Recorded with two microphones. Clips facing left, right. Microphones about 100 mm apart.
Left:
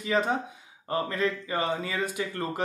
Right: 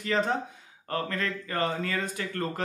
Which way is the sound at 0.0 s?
5° left (ahead or behind).